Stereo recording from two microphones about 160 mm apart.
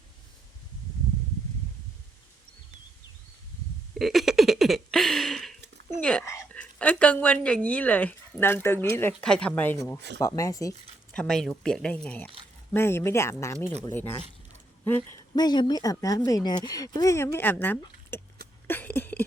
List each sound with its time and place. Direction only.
3.9 s a sound: centre (ahead or behind)
6.0 s speech: 5° left (ahead or behind)
6.2 s whispering: 10° left (ahead or behind)
7.4 s speech: 5° left (ahead or behind)
11.1 s speech: 5° left (ahead or behind)
15.4 s speech: 25° left (ahead or behind); by 18.2 s 10° left (ahead or behind)
18.7 s a sound: 10° left (ahead or behind)